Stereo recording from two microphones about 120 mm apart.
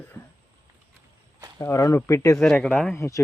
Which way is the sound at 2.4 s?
5° left (ahead or behind).